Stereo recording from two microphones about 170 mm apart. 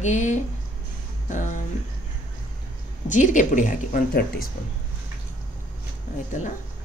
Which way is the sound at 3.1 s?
50° left (ahead or behind).